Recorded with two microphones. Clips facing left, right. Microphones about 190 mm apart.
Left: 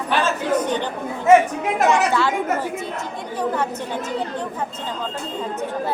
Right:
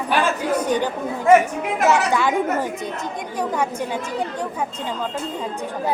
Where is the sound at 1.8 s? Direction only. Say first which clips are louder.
Even; 5° right (ahead or behind).